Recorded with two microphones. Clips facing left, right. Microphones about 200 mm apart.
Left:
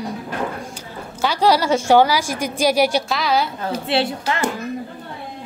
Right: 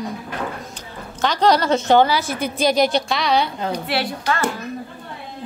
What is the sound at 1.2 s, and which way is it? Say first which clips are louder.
A woman's voice: even; 10° left (ahead or behind).